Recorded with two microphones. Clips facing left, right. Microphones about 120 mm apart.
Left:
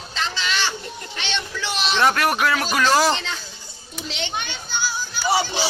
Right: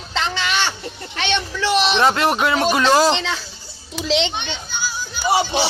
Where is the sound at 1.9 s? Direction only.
25° right (ahead or behind).